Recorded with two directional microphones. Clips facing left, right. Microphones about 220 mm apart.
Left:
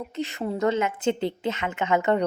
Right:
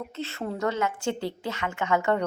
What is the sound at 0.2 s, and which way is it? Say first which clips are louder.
A woman's voice: left 4 dB; 15° left (ahead or behind).